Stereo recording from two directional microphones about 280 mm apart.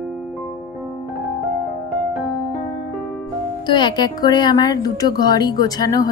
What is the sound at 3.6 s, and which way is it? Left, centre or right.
A woman's voice, centre.